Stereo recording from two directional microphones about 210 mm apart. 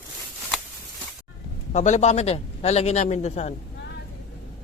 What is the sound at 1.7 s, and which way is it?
A man's voice, 35° left (ahead or behind).